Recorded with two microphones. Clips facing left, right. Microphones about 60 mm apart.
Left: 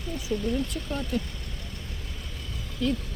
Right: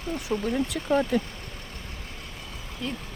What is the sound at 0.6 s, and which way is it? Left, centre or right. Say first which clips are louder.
Speech: right 8 dB; right.